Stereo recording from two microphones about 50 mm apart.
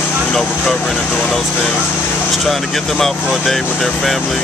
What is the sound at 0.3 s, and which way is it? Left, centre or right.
Speech, centre.